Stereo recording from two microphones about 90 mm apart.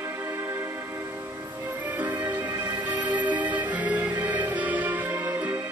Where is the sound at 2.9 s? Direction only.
15° right (ahead or behind).